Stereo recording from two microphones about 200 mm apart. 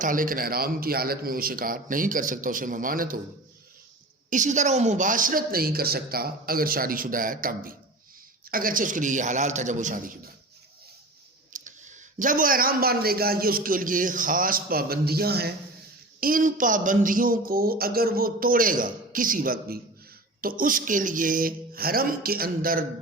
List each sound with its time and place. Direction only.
0.0 s a man's voice: 45° right (ahead or behind)
4.3 s a man's voice: 40° right (ahead or behind)
11.5 s a man's voice: 40° right (ahead or behind)